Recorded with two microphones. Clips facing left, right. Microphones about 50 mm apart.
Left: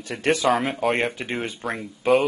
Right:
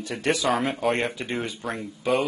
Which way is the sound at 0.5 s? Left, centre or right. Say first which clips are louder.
Left 2 dB; centre.